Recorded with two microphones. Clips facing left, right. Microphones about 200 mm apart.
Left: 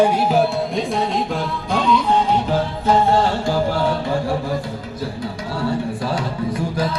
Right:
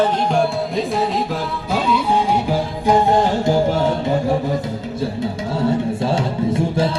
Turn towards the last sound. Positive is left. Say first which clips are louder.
# right 4 dB
turn(degrees=-25)  # may be behind; listen again after turning